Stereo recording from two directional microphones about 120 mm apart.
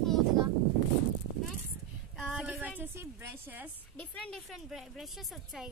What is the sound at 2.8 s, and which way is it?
Speech, 20° right (ahead or behind).